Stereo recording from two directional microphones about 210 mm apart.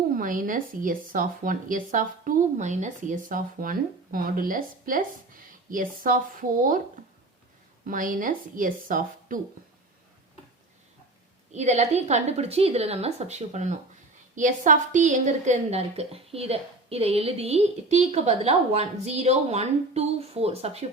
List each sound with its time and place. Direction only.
0.1 s speech: 40° right (ahead or behind)
7.9 s speech: 40° right (ahead or behind)
11.5 s speech: 35° right (ahead or behind)